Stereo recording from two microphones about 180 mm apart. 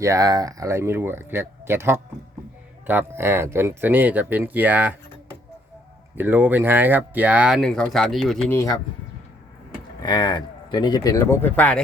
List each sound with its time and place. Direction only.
0.0 s speech: 20° right (ahead or behind)
6.1 s speech: 10° right (ahead or behind)
10.0 s speech: 25° left (ahead or behind); by 11.8 s 10° left (ahead or behind)